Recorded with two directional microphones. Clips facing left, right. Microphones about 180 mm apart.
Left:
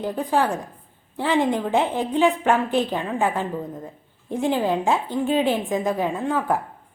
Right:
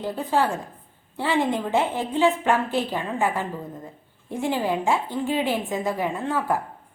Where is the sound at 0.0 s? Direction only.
15° left (ahead or behind).